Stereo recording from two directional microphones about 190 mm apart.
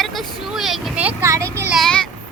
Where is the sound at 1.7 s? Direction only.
Centre (ahead or behind).